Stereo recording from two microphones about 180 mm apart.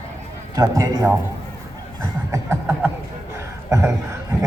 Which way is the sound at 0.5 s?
20° right (ahead or behind).